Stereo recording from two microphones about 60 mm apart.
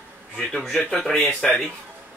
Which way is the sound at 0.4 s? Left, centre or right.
Centre.